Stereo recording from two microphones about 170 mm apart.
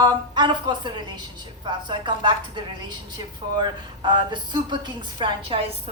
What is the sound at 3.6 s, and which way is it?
A woman's voice, 25° right (ahead or behind).